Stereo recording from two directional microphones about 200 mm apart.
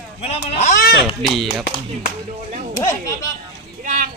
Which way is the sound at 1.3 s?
Centre (ahead or behind).